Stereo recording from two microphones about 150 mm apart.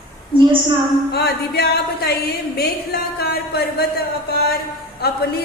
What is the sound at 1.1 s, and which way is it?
Speech, 90° left.